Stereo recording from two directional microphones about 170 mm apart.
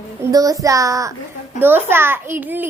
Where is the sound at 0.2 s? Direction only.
20° right (ahead or behind).